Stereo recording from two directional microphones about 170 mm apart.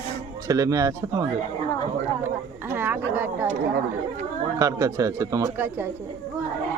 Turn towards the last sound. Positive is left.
turn(degrees=-15)  # may be behind; listen again after turning